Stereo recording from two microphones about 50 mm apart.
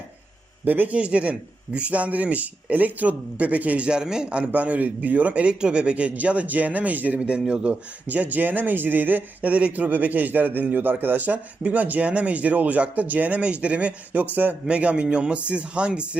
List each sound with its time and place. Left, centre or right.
0.6 s speech: right
0.9 s a man's voice: right
4.5 s a man's voice: right
8.0 s a man's voice: right